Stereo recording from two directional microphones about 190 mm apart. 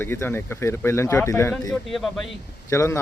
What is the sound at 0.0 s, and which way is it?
Speech, 10° left (ahead or behind).